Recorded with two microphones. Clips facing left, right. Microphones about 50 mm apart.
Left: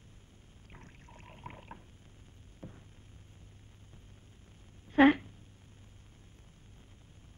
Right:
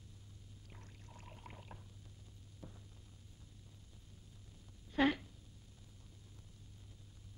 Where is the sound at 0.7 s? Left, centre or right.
Left.